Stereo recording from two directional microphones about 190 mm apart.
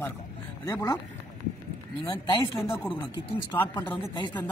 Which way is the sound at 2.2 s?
25° left (ahead or behind).